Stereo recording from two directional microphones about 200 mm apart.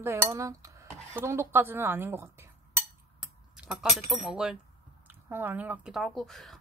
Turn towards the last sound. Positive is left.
turn(degrees=0)  # may be behind; listen again after turning